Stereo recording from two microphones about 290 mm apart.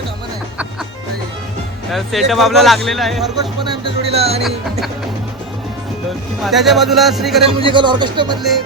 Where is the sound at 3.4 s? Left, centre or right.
Centre.